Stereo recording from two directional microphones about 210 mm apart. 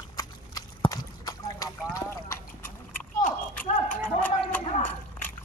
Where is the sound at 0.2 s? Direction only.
20° left (ahead or behind).